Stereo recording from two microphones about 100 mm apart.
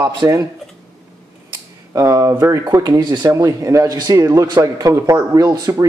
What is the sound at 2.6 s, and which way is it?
Speech, 45° right (ahead or behind).